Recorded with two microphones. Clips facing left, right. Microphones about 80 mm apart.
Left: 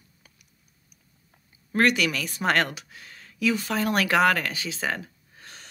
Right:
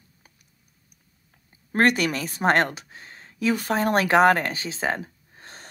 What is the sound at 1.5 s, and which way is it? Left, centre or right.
Speech, right.